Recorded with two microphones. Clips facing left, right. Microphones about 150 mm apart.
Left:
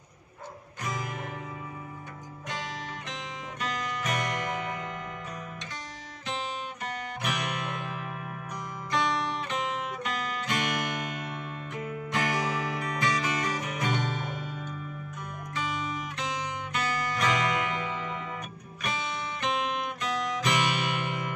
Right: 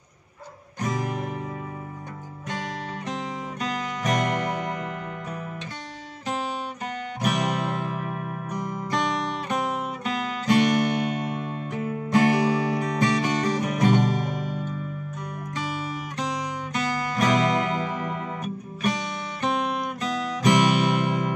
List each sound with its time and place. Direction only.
0.7 s music: 40° right (ahead or behind)
3.6 s music: 35° right (ahead or behind)
6.2 s music: 40° right (ahead or behind)
15.5 s music: 35° right (ahead or behind)